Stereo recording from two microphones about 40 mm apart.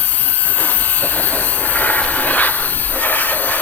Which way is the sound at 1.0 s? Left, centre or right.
Left.